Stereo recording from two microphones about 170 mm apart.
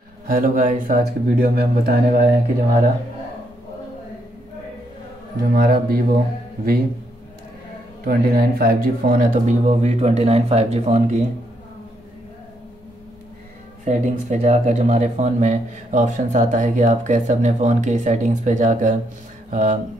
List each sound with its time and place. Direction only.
0.3 s speech: 50° right (ahead or behind)
5.4 s speech: 60° right (ahead or behind)
8.0 s speech: 60° right (ahead or behind); by 11.2 s 45° right (ahead or behind)
13.8 s speech: 45° right (ahead or behind)